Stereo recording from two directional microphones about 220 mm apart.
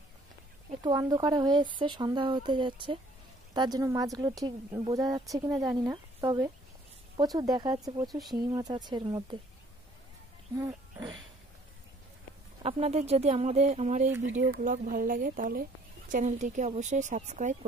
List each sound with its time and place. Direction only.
0.8 s a woman's voice: 15° right (ahead or behind)
10.6 s speech: 15° right (ahead or behind)
12.6 s speech: 25° right (ahead or behind)